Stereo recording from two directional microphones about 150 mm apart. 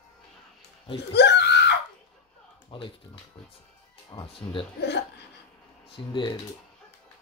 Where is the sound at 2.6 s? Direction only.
35° left (ahead or behind).